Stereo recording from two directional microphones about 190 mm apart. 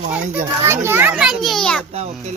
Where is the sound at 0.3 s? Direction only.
15° right (ahead or behind); by 1.8 s 5° left (ahead or behind).